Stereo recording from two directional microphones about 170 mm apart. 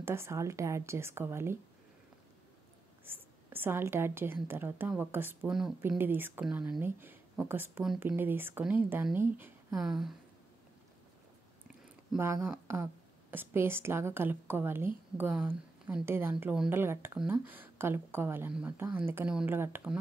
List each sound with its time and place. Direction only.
0.0 s speech: 15° right (ahead or behind)
3.1 s speech: 10° right (ahead or behind)
9.8 s speech: centre (ahead or behind)
12.2 s a woman's voice: 15° right (ahead or behind)